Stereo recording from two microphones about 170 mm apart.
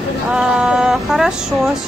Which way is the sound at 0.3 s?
5° right (ahead or behind).